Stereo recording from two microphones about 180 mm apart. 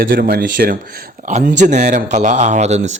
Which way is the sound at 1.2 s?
45° right (ahead or behind).